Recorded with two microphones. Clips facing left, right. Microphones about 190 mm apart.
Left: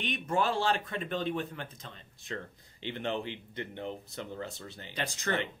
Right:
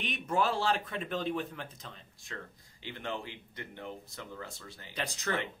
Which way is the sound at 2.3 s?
30° left (ahead or behind).